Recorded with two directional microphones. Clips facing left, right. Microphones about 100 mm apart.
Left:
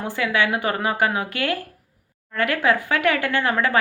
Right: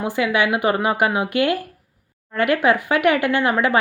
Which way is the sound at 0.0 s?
15° right (ahead or behind).